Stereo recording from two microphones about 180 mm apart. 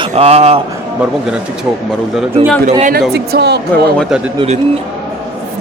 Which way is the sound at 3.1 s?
65° right (ahead or behind).